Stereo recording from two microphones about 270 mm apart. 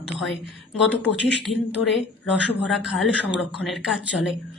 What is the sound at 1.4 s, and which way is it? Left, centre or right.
Speech, centre.